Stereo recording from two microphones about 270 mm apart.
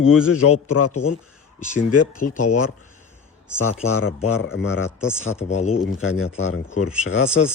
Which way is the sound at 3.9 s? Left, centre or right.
Left.